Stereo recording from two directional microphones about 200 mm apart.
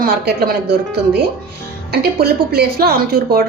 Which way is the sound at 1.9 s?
50° right (ahead or behind).